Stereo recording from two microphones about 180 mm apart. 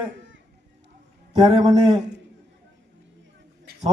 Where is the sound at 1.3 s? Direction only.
25° right (ahead or behind).